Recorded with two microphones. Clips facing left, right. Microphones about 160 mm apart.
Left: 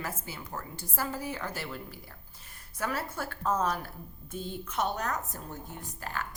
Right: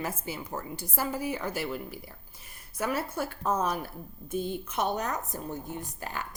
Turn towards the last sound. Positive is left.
turn(degrees=-15)  # may be behind; listen again after turning